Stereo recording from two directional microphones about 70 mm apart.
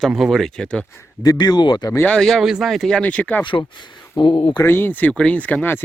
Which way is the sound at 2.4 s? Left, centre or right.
Centre.